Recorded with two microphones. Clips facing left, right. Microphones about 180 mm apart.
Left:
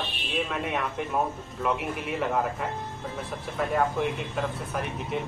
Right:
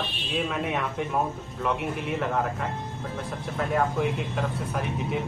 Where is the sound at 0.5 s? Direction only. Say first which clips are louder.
Right 1 dB; centre (ahead or behind).